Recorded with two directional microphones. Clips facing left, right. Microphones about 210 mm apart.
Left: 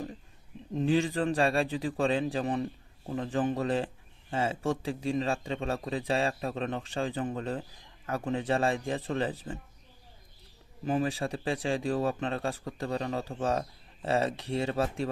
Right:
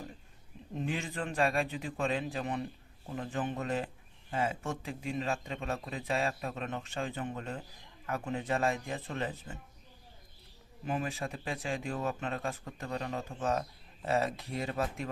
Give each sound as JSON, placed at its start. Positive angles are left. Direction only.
{"t": 0.8, "sound": "speech", "side_deg": 30}
{"t": 10.8, "sound": "speech", "side_deg": 35}